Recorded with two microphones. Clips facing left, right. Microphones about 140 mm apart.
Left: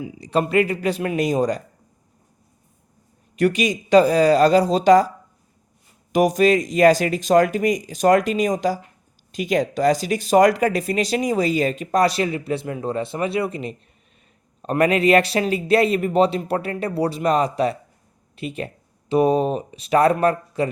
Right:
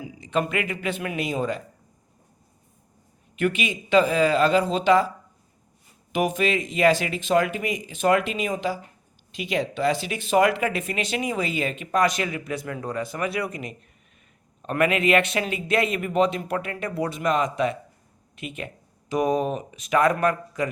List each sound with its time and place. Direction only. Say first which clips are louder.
0.2 s speech: left 6 dB; 35° left (ahead or behind)
3.3 s speech: left 6 dB; 40° left (ahead or behind)
6.1 s speech: left 7 dB; 40° left (ahead or behind)